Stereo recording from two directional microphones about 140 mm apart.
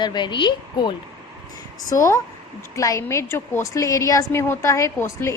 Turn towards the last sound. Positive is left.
turn(degrees=20)  # may be behind; listen again after turning